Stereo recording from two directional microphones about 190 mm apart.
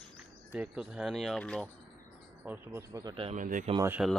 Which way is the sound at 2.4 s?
15° right (ahead or behind).